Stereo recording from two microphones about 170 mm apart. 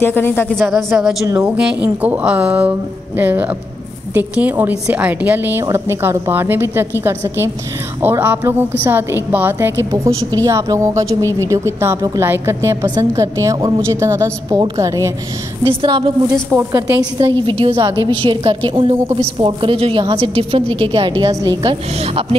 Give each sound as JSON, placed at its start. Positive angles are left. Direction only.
{"t": 0.0, "sound": "speech", "side_deg": 10}
{"t": 0.7, "sound": "a woman's voice", "side_deg": 0}
{"t": 15.6, "sound": "a woman's voice", "side_deg": -30}
{"t": 21.9, "sound": "a woman's voice", "side_deg": -35}